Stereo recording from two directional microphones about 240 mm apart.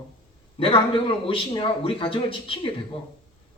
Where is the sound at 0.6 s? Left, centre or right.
Left.